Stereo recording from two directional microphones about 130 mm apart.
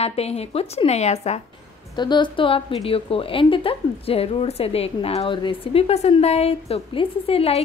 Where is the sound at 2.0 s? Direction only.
35° left (ahead or behind).